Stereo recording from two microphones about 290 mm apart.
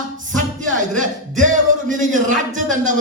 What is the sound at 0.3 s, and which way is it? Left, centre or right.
Music, right.